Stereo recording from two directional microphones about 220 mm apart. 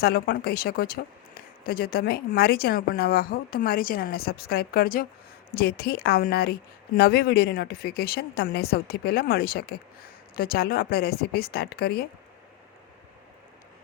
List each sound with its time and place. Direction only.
0.0 s speech: 45° left (ahead or behind)